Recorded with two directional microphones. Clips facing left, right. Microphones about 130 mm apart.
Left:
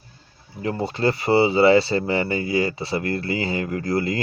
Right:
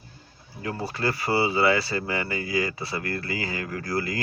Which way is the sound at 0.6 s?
25° left (ahead or behind).